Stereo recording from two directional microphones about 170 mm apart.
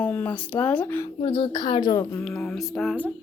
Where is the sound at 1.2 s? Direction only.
30° left (ahead or behind).